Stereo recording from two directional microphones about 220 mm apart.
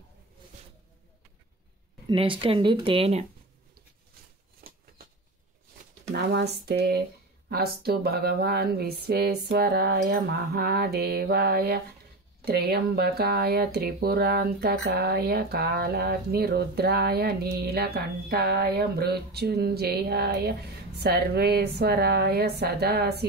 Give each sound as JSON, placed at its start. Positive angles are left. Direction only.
{"t": 2.0, "sound": "speech", "side_deg": -25}
{"t": 4.6, "sound": "bird flight", "side_deg": -45}
{"t": 6.1, "sound": "speech", "side_deg": -50}